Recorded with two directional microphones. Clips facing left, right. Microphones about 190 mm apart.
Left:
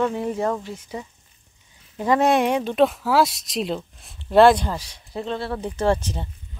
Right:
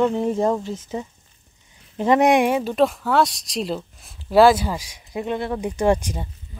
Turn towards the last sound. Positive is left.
turn(degrees=-10)  # may be behind; listen again after turning